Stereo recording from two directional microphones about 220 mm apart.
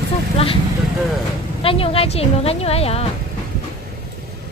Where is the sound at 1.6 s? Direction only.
25° left (ahead or behind).